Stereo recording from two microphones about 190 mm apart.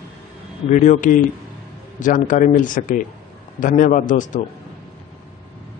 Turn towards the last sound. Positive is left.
turn(degrees=40)  # may be behind; listen again after turning